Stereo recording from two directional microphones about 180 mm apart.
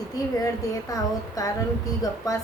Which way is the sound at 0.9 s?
20° left (ahead or behind).